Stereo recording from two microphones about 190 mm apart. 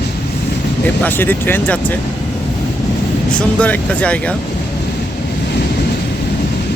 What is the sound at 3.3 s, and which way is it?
Speech, 5° left (ahead or behind).